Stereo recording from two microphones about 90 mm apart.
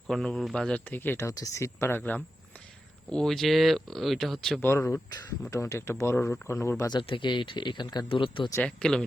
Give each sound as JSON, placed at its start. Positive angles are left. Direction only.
{"t": 0.1, "sound": "speech", "side_deg": 5}
{"t": 3.1, "sound": "speech", "side_deg": 5}
{"t": 4.6, "sound": "speech", "side_deg": 25}
{"t": 7.0, "sound": "speech", "side_deg": 65}
{"t": 8.1, "sound": "speech", "side_deg": 75}
{"t": 8.6, "sound": "speech", "side_deg": 10}